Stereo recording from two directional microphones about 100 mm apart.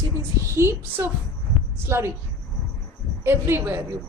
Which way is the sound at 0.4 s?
25° right (ahead or behind).